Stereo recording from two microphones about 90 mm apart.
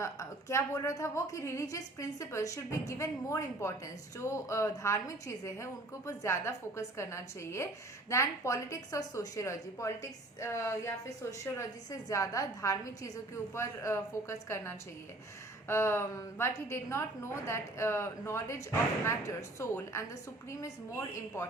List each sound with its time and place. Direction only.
0.0 s a woman's voice: 35° left (ahead or behind)